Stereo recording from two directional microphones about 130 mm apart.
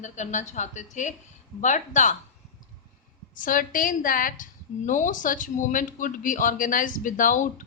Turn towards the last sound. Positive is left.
turn(degrees=85)